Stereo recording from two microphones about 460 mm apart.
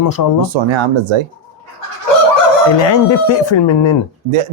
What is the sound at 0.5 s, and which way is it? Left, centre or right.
Speech, right.